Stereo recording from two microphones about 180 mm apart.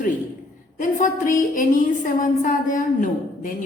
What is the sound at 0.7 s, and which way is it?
A woman's voice, 45° left (ahead or behind).